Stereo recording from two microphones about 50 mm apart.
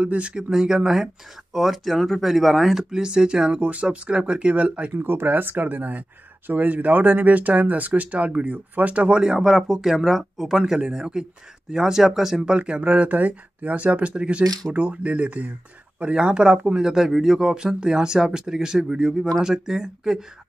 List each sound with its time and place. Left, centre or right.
0.0 s speech: right
0.3 s speech: centre
5.0 s speech: right; by 12.4 s centre
12.4 s speech: right